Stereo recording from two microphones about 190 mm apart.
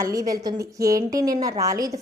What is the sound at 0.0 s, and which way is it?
A woman's voice, 20° right (ahead or behind).